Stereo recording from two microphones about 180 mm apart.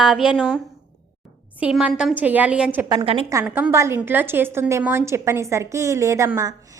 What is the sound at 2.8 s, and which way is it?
Speech, 25° right (ahead or behind).